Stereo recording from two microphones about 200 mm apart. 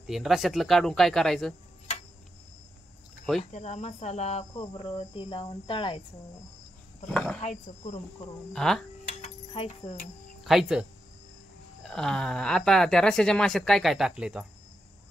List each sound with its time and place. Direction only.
0.0 s speech: centre (ahead or behind)
3.5 s cricket: 35° left (ahead or behind)
7.1 s speech: 5° left (ahead or behind)
8.5 s speech: centre (ahead or behind)
9.2 s a sound: 30° left (ahead or behind)
10.4 s speech: centre (ahead or behind)
11.9 s speech: centre (ahead or behind)